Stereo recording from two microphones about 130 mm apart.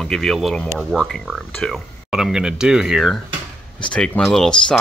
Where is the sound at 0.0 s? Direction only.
Centre (ahead or behind).